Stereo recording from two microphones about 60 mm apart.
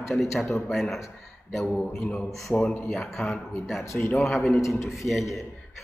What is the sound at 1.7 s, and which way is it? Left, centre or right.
Speech, centre.